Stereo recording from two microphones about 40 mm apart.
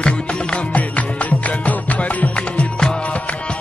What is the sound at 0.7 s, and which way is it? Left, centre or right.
Music, left.